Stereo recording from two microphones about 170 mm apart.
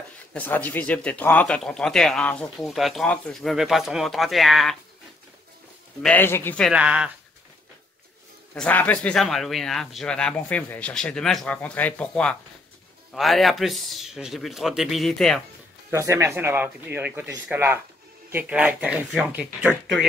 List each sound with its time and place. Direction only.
0.3 s speech: 10° left (ahead or behind)
6.0 s speech: 10° left (ahead or behind)
6.7 s speech: 5° right (ahead or behind)
8.5 s speech: 10° left (ahead or behind)
15.9 s speech: 15° right (ahead or behind)